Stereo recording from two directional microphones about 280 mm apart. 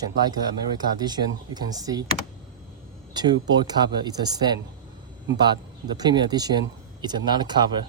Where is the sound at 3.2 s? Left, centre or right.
Centre.